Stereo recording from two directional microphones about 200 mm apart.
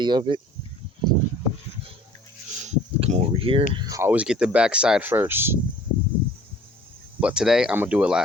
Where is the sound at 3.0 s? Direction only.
30° right (ahead or behind).